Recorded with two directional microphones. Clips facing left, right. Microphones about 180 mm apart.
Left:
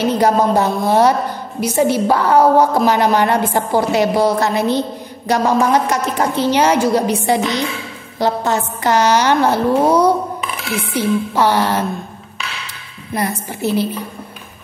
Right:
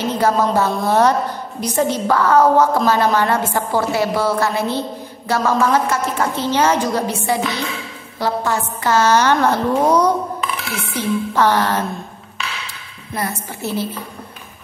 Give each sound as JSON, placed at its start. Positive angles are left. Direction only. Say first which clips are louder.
{"t": 0.0, "sound": "a woman's voice", "louder": "left 3 dB", "side_deg": 15}
{"t": 13.6, "sound": "a woman's voice", "louder": "left 6 dB", "side_deg": 15}